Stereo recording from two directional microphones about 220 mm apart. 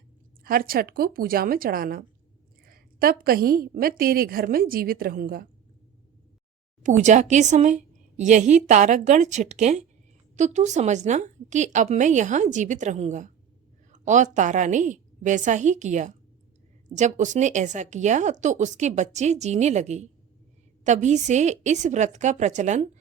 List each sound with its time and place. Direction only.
0.4 s speech: 40° right (ahead or behind)
6.8 s speech: 35° right (ahead or behind)